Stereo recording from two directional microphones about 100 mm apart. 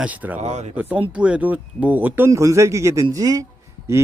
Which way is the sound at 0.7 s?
15° right (ahead or behind).